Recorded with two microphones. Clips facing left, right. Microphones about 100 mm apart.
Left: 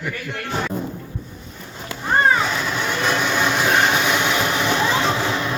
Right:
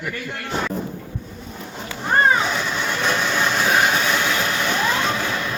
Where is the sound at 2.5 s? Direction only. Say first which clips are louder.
Left 1 dB; 5° left (ahead or behind).